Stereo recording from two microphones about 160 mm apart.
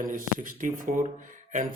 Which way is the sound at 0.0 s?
60° right (ahead or behind).